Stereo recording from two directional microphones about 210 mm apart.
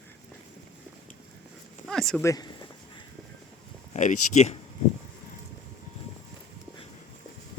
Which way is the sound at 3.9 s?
35° left (ahead or behind).